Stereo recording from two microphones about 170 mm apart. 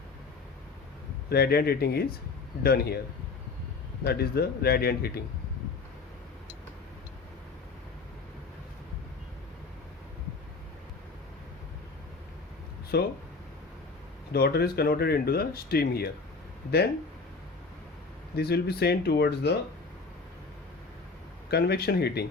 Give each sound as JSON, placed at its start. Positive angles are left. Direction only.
{"t": 1.3, "sound": "speech", "side_deg": 65}
{"t": 4.0, "sound": "speech", "side_deg": 65}
{"t": 12.9, "sound": "speech", "side_deg": 70}
{"t": 14.3, "sound": "speech", "side_deg": 70}
{"t": 18.3, "sound": "speech", "side_deg": 70}
{"t": 21.5, "sound": "speech", "side_deg": 70}